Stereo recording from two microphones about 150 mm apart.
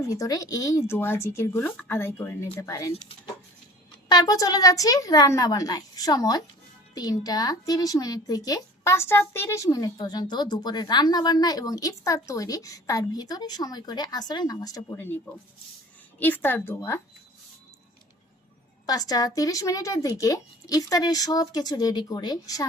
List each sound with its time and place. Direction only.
0.0 s a woman's voice: 20° left (ahead or behind)
4.1 s a woman's voice: 25° left (ahead or behind)
16.2 s speech: 15° left (ahead or behind)
18.9 s a woman's voice: 25° left (ahead or behind)